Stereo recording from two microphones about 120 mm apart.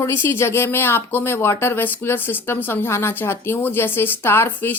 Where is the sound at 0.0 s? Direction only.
20° left (ahead or behind).